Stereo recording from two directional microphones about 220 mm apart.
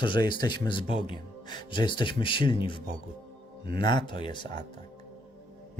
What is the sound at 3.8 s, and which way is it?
Speech, 20° left (ahead or behind).